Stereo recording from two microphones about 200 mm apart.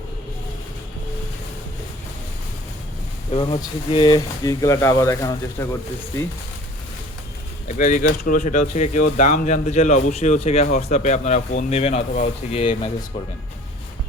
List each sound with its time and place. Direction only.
3.3 s speech: 25° left (ahead or behind)
7.7 s speech: 40° left (ahead or behind)